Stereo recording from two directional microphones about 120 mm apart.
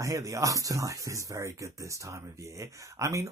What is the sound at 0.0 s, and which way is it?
Speech, 25° right (ahead or behind).